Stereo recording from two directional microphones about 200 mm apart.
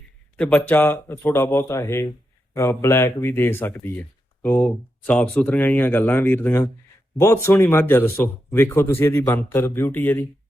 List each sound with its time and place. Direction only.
0.3 s speech: 5° left (ahead or behind)